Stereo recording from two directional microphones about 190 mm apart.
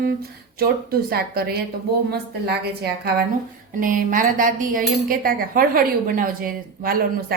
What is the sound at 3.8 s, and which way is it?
A woman's voice, 45° right (ahead or behind).